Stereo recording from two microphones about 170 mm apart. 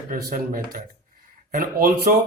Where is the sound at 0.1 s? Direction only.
55° right (ahead or behind).